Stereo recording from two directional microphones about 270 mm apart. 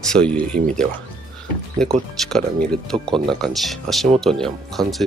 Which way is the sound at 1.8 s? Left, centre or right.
Centre.